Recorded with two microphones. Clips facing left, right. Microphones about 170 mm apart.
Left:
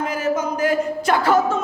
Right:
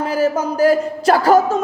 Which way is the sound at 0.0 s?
35° right (ahead or behind).